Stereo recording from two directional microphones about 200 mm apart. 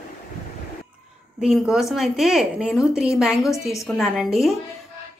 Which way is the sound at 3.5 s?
15° left (ahead or behind).